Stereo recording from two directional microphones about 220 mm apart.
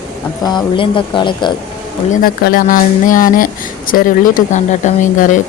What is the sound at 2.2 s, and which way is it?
Speech, 40° left (ahead or behind).